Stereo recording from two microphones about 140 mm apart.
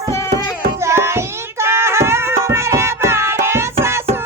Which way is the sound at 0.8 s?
20° right (ahead or behind).